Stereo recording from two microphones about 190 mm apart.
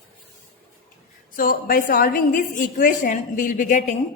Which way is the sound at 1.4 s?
50° left (ahead or behind).